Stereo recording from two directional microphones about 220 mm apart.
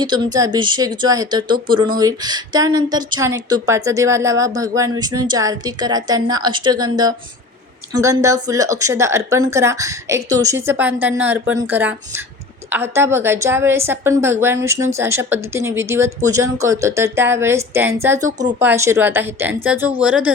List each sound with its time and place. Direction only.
0.3 s speech: 20° right (ahead or behind)
18.3 s speech: 35° right (ahead or behind)
18.6 s speech: 10° right (ahead or behind)